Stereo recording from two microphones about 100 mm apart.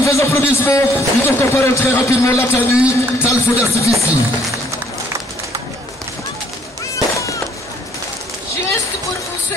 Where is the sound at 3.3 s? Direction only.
30° left (ahead or behind).